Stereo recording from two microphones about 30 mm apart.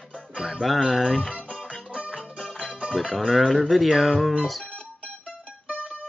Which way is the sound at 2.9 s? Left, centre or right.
Centre.